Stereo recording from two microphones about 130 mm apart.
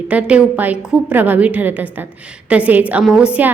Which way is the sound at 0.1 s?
10° right (ahead or behind).